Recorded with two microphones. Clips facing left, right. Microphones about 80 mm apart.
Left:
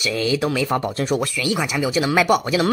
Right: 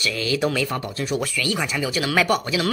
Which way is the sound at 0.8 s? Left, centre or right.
Left.